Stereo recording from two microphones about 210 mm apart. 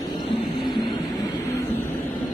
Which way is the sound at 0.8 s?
20° left (ahead or behind).